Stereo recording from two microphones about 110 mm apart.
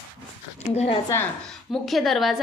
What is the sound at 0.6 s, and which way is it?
Speech, 75° left (ahead or behind).